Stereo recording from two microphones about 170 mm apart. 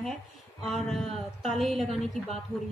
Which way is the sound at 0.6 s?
Centre (ahead or behind).